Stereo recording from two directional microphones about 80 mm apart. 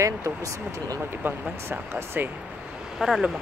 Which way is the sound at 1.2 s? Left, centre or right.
Right.